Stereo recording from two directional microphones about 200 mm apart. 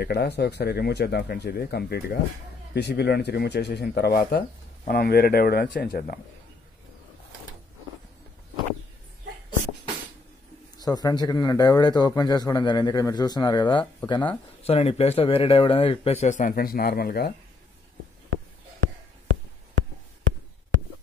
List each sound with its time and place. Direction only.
0.0 s speech: 55° left (ahead or behind)
10.8 s speech: 20° left (ahead or behind); by 17.3 s 50° left (ahead or behind)
18.3 s a sound: 90° right